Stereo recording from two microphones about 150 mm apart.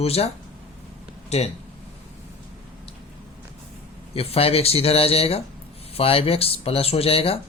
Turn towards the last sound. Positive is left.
turn(degrees=40)  # may be behind; listen again after turning